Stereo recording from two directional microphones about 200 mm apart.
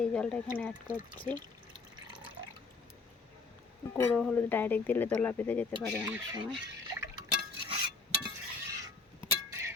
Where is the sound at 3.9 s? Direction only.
10° left (ahead or behind).